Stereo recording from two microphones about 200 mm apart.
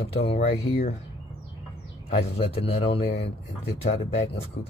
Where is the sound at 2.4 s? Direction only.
30° left (ahead or behind).